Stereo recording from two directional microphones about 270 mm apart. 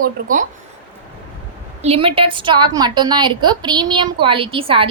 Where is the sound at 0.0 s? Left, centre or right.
Right.